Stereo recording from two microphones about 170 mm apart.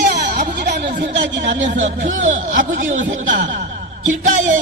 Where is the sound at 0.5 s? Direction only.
80° right.